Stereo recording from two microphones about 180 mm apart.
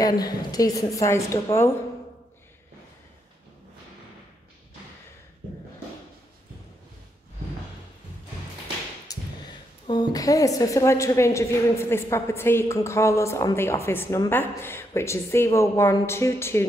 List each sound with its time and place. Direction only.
0.0 s a woman's voice: 20° left (ahead or behind)
9.8 s a woman's voice: 20° left (ahead or behind)